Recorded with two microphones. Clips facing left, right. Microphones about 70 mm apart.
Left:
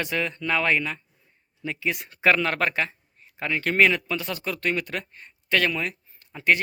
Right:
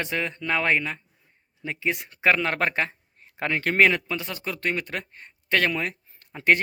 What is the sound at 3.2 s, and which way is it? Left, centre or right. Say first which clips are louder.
Speech: right 1 dB; right.